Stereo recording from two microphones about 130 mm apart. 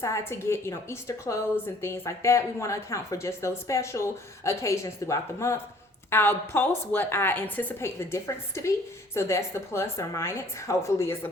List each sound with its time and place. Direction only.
0.0 s a woman's voice: 20° left (ahead or behind)